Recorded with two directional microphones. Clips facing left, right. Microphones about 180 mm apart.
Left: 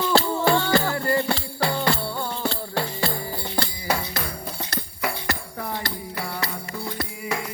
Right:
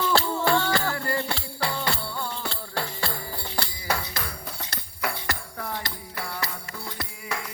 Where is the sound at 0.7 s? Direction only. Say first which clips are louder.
Left 5 dB; 25° left (ahead or behind).